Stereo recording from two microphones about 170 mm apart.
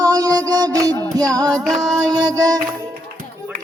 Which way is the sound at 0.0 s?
20° right (ahead or behind).